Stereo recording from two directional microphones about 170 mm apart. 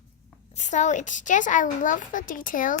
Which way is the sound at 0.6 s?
45° left (ahead or behind).